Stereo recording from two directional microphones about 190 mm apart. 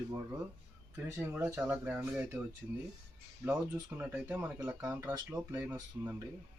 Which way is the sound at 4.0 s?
10° right (ahead or behind).